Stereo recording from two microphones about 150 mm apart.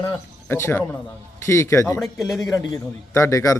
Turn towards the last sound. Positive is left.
turn(degrees=20)  # may be behind; listen again after turning